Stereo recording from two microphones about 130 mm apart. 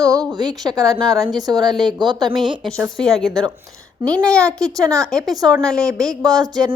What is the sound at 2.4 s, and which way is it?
A woman's voice, centre (ahead or behind).